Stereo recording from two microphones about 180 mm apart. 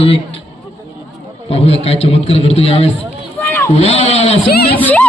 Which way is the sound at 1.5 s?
35° left (ahead or behind).